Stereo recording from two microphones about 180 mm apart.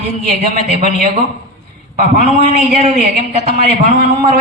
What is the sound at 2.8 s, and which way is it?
Speech, 35° right (ahead or behind).